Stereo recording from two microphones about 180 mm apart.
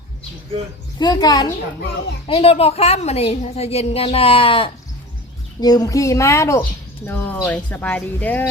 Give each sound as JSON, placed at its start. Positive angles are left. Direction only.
{"t": 0.9, "sound": "a child's voice", "side_deg": 20}
{"t": 2.2, "sound": "a woman's voice", "side_deg": 30}